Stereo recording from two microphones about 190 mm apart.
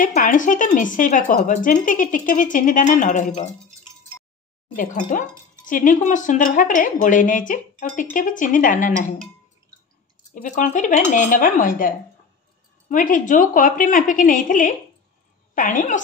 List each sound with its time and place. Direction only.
0.0 s speech: 45° left (ahead or behind)
4.7 s speech: 45° left (ahead or behind)
10.3 s speech: 45° left (ahead or behind)